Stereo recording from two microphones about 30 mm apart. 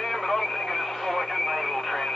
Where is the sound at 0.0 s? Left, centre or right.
Centre.